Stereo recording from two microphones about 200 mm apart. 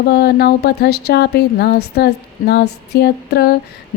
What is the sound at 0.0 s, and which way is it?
A woman's voice, 55° left (ahead or behind).